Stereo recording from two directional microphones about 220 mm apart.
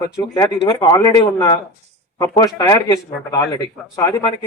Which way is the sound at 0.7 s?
15° left (ahead or behind).